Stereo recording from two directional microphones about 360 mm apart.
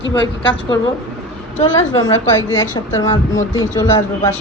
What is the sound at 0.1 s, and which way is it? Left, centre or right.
Speech, centre.